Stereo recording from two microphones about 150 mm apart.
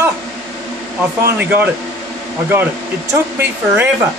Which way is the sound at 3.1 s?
15° right (ahead or behind).